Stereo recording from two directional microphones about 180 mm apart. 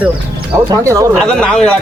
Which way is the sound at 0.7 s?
15° right (ahead or behind).